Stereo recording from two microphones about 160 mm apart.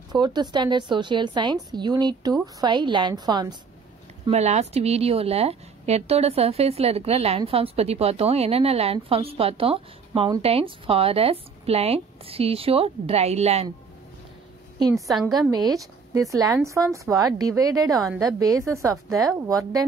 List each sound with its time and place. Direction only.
0.1 s a woman's voice: 25° right (ahead or behind)
4.3 s a woman's voice: 45° right (ahead or behind)
15.0 s a woman's voice: centre (ahead or behind)
15.5 s a woman's voice: 25° right (ahead or behind)